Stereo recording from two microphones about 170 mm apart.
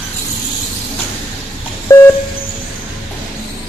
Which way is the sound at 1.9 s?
15° left (ahead or behind).